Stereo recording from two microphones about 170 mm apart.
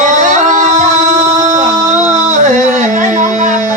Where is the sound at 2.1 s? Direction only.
45° right (ahead or behind).